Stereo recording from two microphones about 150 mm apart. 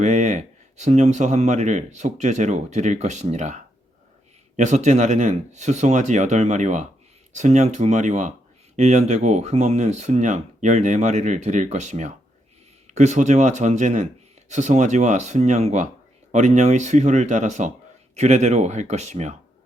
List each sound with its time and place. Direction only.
0.0 s speech: 50° right (ahead or behind)